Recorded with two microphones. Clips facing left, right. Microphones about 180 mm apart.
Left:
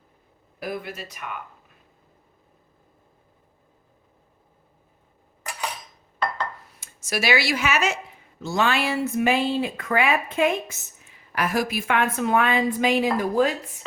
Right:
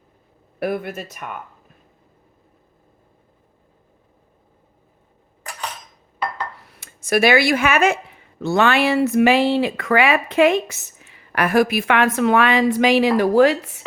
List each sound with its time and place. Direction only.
0.6 s speech: 60° right (ahead or behind)
6.7 s speech: 60° right (ahead or behind); by 13.7 s 75° right (ahead or behind)